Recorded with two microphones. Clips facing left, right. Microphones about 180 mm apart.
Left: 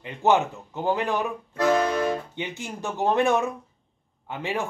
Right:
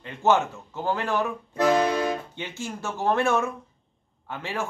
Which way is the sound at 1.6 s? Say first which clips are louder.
Even; 15° right (ahead or behind).